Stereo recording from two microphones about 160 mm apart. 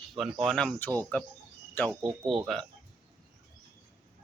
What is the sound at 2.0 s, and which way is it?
Speech, 30° right (ahead or behind).